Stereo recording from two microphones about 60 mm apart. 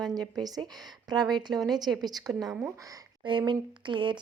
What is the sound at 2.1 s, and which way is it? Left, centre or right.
Speech, right.